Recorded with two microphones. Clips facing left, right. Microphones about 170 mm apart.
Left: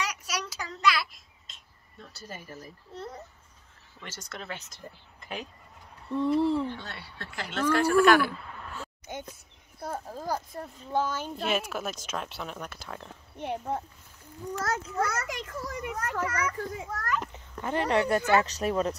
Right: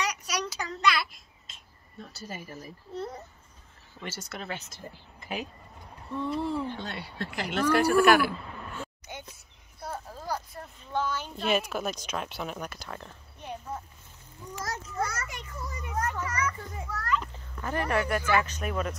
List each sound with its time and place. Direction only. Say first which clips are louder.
0.0 s child singing: right 2 dB; 5° left (ahead or behind)
4.0 s speech: right 3 dB; 10° right (ahead or behind)
6.6 s speech: even; 15° right (ahead or behind)
9.0 s a sound: left 4 dB; 50° left (ahead or behind)
10.6 s speech: left 3 dB; 40° left (ahead or behind)
11.3 s speech: right 4 dB; centre (ahead or behind)
13.4 s a child's voice: left 6 dB; 65° left (ahead or behind)
16.9 s children playing: right 3 dB; 45° left (ahead or behind)
17.3 s speech: left 2 dB; 20° left (ahead or behind)